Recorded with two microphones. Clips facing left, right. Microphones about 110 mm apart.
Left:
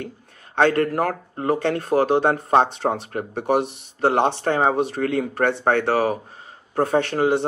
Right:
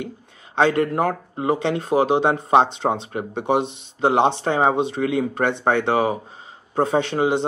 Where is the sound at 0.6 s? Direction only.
15° right (ahead or behind).